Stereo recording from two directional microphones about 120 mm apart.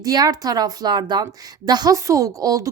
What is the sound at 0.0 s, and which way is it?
A woman's voice, 30° right (ahead or behind).